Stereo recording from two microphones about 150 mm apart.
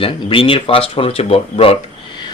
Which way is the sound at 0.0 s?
35° left (ahead or behind).